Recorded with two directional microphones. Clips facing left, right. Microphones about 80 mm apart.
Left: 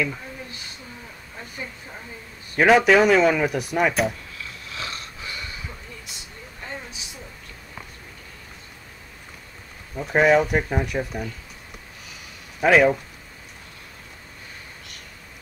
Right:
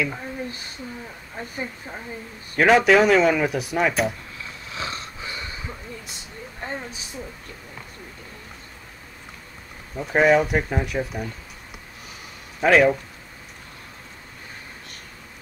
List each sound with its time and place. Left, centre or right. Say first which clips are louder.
2.5 s speech: even; centre
4.6 s wheeze: right 3 dB; right
6.0 s a sound: right 3 dB; right
9.9 s speech: even; centre
12.5 s speech: even; centre